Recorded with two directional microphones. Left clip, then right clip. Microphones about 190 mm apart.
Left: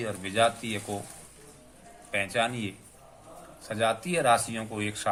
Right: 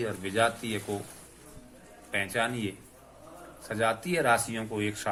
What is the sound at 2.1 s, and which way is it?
Speech, 20° left (ahead or behind).